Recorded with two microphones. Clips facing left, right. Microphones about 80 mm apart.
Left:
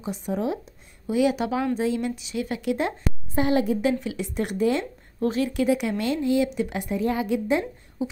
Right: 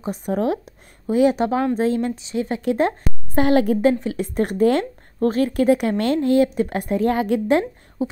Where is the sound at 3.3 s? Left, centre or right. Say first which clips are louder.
Right 5 dB; right.